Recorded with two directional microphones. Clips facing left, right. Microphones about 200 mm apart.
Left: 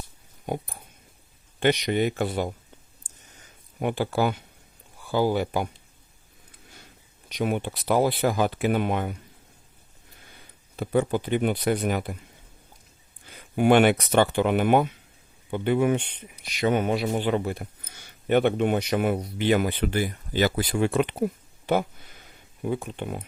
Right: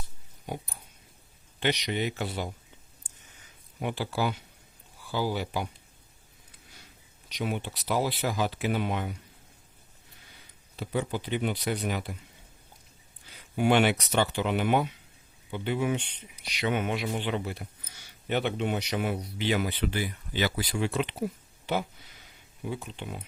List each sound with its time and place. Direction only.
1.5 s speech: 50° left (ahead or behind)
3.1 s a sound: 45° left (ahead or behind)
3.8 s speech: 50° left (ahead or behind)
7.3 s speech: 50° left (ahead or behind)
10.8 s speech: 50° left (ahead or behind)
13.2 s speech: 50° left (ahead or behind)
21.7 s a sound: 50° left (ahead or behind)
22.6 s speech: 50° left (ahead or behind)